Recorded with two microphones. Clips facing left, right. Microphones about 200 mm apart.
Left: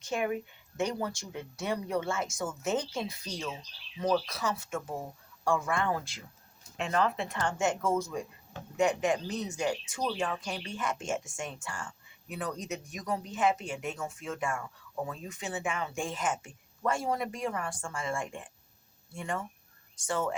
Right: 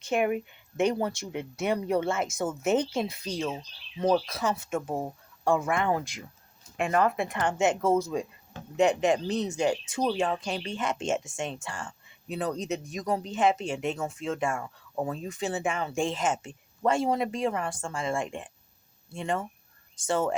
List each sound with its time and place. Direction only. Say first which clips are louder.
0.1 s speech: right 5 dB; 20° right (ahead or behind)
3.4 s speech: right 6 dB; 35° right (ahead or behind)
4.4 s speech: right 5 dB; 20° right (ahead or behind)
6.8 s speech: right 4 dB; 55° right (ahead or behind)
7.4 s speech: right 4 dB; 20° right (ahead or behind)
7.8 s speech: right 5 dB; 35° right (ahead or behind)